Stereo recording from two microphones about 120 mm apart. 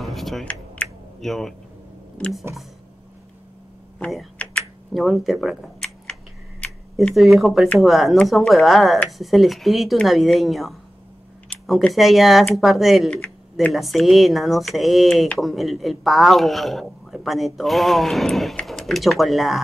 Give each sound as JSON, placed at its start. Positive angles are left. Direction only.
{"t": 0.0, "sound": "computer keyboard", "side_deg": 0}
{"t": 1.2, "sound": "speech", "side_deg": 0}
{"t": 2.5, "sound": "speech", "side_deg": -20}
{"t": 4.0, "sound": "speech", "side_deg": 0}
{"t": 6.6, "sound": "a sound", "side_deg": 10}
{"t": 7.2, "sound": "speech", "side_deg": 0}
{"t": 11.9, "sound": "speech", "side_deg": 0}